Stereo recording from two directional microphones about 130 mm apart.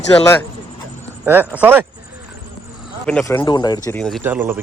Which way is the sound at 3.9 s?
Centre (ahead or behind).